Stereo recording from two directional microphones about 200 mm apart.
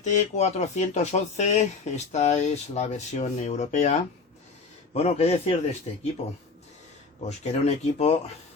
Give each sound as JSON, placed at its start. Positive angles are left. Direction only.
{"t": 0.0, "sound": "speech", "side_deg": 35}
{"t": 4.9, "sound": "speech", "side_deg": 30}
{"t": 7.3, "sound": "speech", "side_deg": 35}